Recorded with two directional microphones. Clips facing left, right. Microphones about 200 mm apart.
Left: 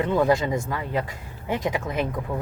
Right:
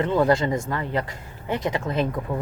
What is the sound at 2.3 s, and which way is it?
Speech, 10° right (ahead or behind).